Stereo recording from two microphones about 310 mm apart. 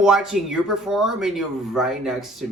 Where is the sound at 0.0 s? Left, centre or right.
Centre.